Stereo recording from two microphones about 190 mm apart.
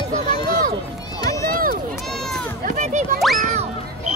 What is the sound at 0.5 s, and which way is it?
Run, 50° right (ahead or behind).